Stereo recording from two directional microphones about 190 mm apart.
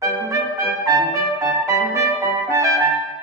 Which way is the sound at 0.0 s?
15° right (ahead or behind).